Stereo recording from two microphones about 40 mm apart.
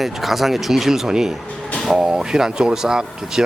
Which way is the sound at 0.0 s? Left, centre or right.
Centre.